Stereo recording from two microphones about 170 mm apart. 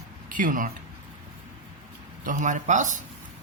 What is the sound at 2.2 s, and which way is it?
Speech, 50° right (ahead or behind).